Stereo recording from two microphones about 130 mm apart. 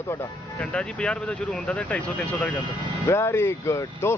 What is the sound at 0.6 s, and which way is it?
Speech, 10° left (ahead or behind).